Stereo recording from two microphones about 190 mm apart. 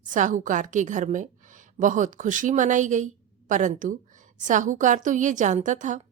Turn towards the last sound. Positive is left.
turn(degrees=-40)  # may be behind; listen again after turning